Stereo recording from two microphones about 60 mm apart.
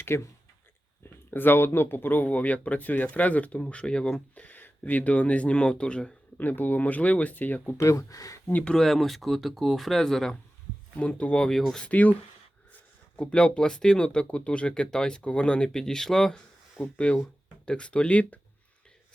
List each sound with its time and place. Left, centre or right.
0.1 s speech: left; by 4.2 s centre
4.4 s speech: left
6.3 s speech: left
7.8 s speech: left
8.6 s speech: centre
11.0 s speech: left
11.9 s speech: left
13.1 s speech: centre
16.8 s speech: left